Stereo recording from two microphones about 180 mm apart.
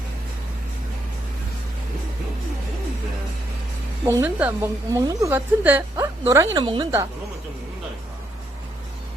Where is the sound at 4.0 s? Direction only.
10° right (ahead or behind).